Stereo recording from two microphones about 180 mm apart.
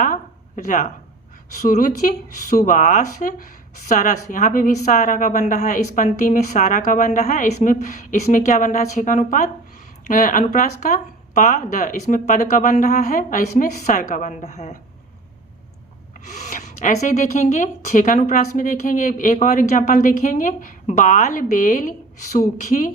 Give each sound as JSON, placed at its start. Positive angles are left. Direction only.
{"t": 0.0, "sound": "a sound", "side_deg": 45}
{"t": 1.6, "sound": "speech", "side_deg": 50}
{"t": 16.2, "sound": "speech", "side_deg": 40}